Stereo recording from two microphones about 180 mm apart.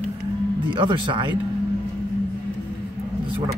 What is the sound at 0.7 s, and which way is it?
Speech, 25° right (ahead or behind).